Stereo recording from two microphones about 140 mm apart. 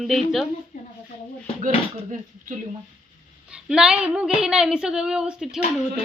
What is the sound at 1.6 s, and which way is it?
Speech, 70° right (ahead or behind).